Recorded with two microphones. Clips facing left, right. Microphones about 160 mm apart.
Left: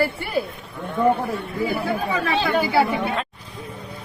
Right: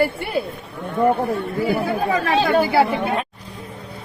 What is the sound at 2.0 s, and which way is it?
Speech, 45° right (ahead or behind).